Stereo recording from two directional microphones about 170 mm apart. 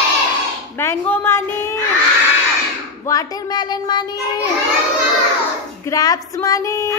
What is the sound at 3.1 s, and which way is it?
A child's voice, 20° left (ahead or behind).